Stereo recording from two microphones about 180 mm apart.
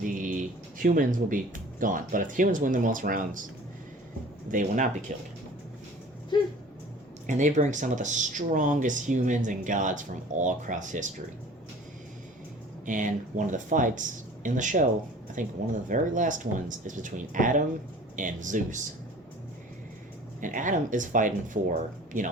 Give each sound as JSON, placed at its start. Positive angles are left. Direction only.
{"t": 0.0, "sound": "a sound", "side_deg": -50}
{"t": 0.8, "sound": "speech", "side_deg": -50}
{"t": 4.5, "sound": "speech", "side_deg": -45}
{"t": 7.3, "sound": "speech", "side_deg": -45}
{"t": 12.8, "sound": "speech", "side_deg": -45}
{"t": 20.4, "sound": "speech", "side_deg": -45}